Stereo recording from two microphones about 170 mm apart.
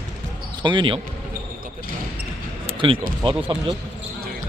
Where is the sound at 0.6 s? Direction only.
30° right (ahead or behind).